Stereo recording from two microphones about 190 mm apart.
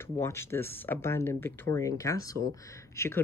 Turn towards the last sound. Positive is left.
turn(degrees=15)  # may be behind; listen again after turning